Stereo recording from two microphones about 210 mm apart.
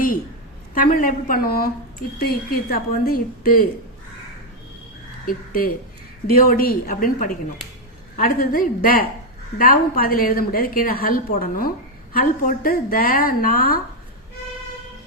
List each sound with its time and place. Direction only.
0.9 s a woman's voice: 40° left (ahead or behind)
5.2 s a woman's voice: 45° left (ahead or behind)